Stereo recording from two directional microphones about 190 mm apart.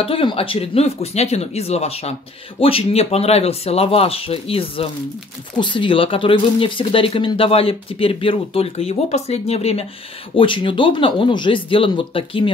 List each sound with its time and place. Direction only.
0.0 s speech: 30° left (ahead or behind)